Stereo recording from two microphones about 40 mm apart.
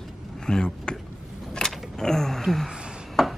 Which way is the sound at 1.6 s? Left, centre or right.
Centre.